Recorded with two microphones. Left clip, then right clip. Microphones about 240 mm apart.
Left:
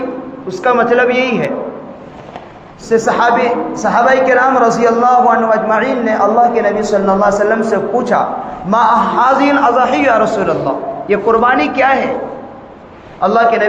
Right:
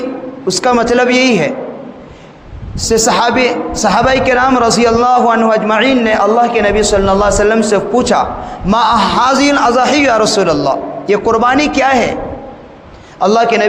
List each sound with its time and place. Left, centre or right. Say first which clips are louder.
0.4 s a man's voice: right 1 dB; right
2.9 s a man's voice: even; right
7.3 s a man's voice: right 2 dB; right
8.7 s a man's voice: even; right
13.1 s a man's voice: right 1 dB; right